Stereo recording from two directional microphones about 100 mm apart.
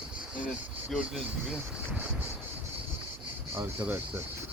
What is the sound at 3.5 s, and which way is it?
Speech, 20° right (ahead or behind).